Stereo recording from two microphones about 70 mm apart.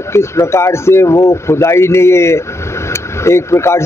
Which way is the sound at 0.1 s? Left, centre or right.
Left.